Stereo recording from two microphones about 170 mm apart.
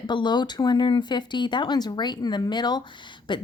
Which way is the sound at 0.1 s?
25° left (ahead or behind).